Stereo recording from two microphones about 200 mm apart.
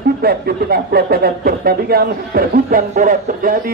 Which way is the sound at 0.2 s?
50° right (ahead or behind).